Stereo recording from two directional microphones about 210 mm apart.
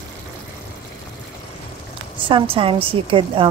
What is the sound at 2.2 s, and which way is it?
A woman's voice, 25° right (ahead or behind).